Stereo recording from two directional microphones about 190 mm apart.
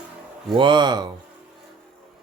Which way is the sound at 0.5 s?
25° right (ahead or behind).